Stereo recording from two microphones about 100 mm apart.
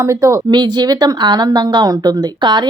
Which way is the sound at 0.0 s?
30° right (ahead or behind).